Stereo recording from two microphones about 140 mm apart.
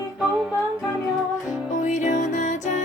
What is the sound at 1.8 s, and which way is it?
Music, 60° left (ahead or behind).